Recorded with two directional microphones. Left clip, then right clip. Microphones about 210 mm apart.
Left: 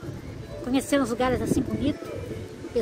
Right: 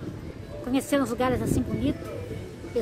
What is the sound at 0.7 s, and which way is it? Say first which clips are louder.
Speech: left 1 dB; centre (ahead or behind).